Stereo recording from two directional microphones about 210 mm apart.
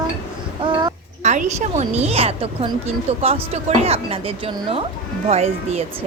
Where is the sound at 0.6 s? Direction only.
20° right (ahead or behind).